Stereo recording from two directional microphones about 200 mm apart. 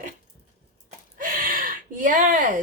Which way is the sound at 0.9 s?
45° right (ahead or behind).